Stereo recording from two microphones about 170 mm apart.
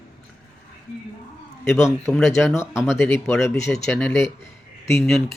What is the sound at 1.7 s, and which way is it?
Speech, 15° left (ahead or behind).